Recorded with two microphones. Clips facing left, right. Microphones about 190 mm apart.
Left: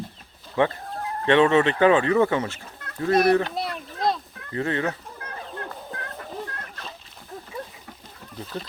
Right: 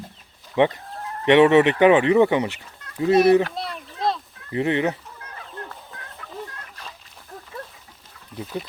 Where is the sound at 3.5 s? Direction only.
Centre (ahead or behind).